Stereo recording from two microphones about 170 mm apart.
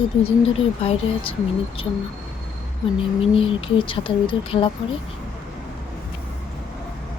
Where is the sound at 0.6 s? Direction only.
35° left (ahead or behind).